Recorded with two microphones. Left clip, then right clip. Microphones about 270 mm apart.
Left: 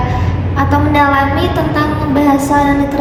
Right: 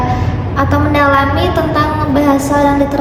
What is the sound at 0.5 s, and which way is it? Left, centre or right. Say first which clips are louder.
A woman's voice: left 1 dB; centre.